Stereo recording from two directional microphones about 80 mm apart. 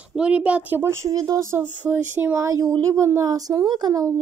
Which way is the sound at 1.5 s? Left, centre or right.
Right.